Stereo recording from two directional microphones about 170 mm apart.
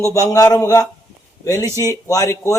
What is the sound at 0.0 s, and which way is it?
Speech, 20° left (ahead or behind).